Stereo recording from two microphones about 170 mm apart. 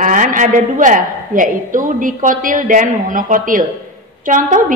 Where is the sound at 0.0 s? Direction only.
50° right (ahead or behind).